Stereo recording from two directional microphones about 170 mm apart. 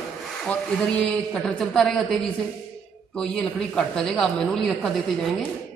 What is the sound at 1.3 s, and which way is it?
Speech, 5° left (ahead or behind).